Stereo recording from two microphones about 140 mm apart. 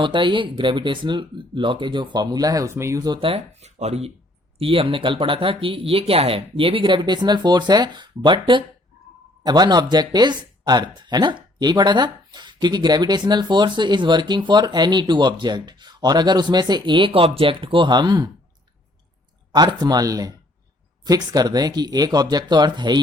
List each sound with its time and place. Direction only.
0.0 s speech: 35° right (ahead or behind)
19.5 s speech: 30° right (ahead or behind)